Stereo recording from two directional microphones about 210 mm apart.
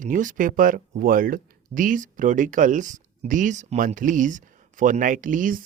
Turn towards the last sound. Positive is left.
turn(degrees=-40)  # may be behind; listen again after turning